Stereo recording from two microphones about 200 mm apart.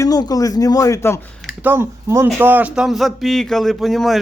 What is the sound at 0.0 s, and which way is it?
Speech, 20° left (ahead or behind).